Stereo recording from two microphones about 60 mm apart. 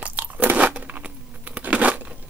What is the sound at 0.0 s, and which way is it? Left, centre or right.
Crunch, right.